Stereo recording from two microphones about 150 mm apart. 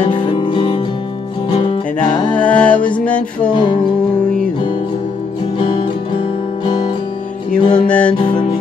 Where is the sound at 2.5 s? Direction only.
10° left (ahead or behind).